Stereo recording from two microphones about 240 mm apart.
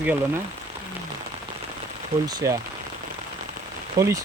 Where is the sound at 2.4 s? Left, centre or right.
Centre.